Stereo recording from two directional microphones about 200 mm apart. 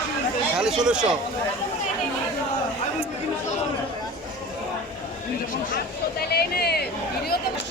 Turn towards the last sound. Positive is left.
turn(degrees=50)  # may be behind; listen again after turning